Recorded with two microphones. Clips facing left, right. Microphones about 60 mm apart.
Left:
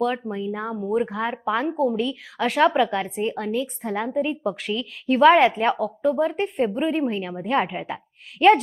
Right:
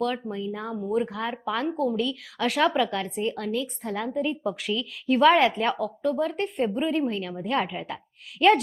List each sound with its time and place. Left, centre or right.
0.3 s speech: centre
7.4 s speech: centre
7.7 s a woman's voice: left
7.9 s a woman's voice: centre